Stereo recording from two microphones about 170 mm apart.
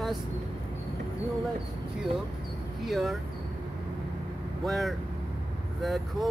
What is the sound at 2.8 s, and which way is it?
Speech, centre (ahead or behind).